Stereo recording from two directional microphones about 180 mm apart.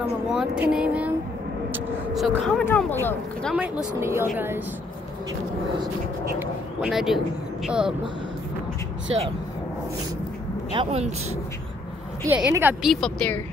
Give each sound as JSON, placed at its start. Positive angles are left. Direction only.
{"t": 0.3, "sound": "speech", "side_deg": -5}
{"t": 2.1, "sound": "speech", "side_deg": 0}
{"t": 2.6, "sound": "speech", "side_deg": 10}
{"t": 3.5, "sound": "speech", "side_deg": -10}
{"t": 6.4, "sound": "speech", "side_deg": -5}
{"t": 10.7, "sound": "speech", "side_deg": -30}
{"t": 12.4, "sound": "speech", "side_deg": -10}
{"t": 12.9, "sound": "speech", "side_deg": 5}